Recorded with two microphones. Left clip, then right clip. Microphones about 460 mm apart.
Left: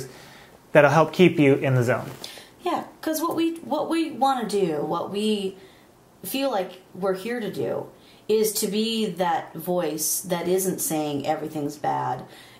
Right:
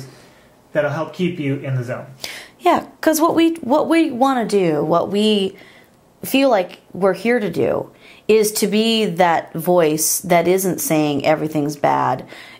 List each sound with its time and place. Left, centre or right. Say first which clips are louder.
0.7 s speech: left 4 dB; left
2.2 s a woman's voice: right 12 dB; right